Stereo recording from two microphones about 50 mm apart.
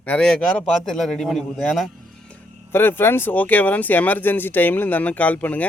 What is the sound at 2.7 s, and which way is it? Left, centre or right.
Speech, left.